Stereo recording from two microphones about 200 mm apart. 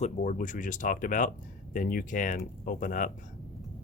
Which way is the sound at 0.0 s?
40° left (ahead or behind).